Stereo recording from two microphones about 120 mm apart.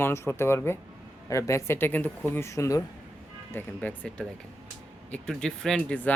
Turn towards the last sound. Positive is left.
turn(degrees=5)  # may be behind; listen again after turning